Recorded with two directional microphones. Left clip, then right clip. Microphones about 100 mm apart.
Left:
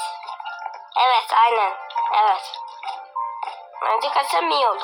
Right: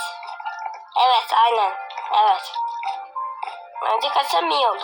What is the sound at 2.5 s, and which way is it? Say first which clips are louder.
Music: right 6 dB; 35° right (ahead or behind).